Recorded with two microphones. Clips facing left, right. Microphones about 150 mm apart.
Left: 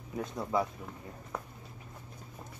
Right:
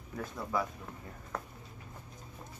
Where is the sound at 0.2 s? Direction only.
20° left (ahead or behind).